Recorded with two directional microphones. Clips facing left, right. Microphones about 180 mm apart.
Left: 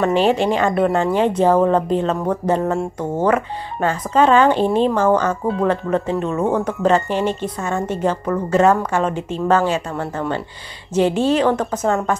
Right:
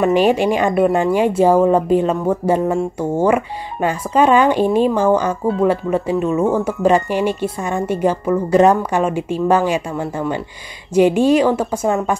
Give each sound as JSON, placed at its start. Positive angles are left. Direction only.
{"t": 0.0, "sound": "speech", "side_deg": -15}